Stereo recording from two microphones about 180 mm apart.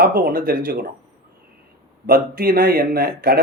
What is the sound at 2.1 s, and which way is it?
Speech, 55° right (ahead or behind).